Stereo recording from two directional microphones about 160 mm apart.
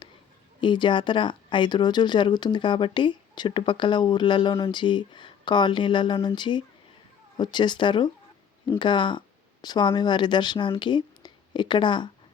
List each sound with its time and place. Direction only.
0.6 s speech: 30° left (ahead or behind)